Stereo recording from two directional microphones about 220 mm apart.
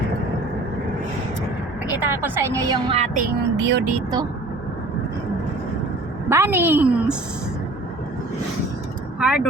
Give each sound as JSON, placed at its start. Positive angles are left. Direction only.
{"t": 1.9, "sound": "a woman's voice", "side_deg": -10}
{"t": 3.2, "sound": "speech", "side_deg": -50}
{"t": 6.2, "sound": "a woman's voice", "side_deg": -10}
{"t": 9.1, "sound": "speech", "side_deg": -5}